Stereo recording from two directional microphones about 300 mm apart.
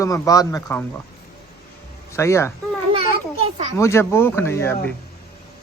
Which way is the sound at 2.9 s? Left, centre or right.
Centre.